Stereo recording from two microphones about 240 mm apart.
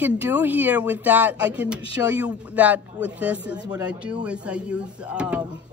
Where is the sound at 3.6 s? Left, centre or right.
Centre.